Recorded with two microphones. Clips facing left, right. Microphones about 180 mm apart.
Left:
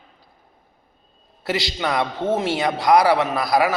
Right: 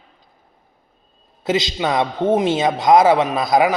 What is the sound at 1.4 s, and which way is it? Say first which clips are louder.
A man's voice: right 4 dB; 20° right (ahead or behind).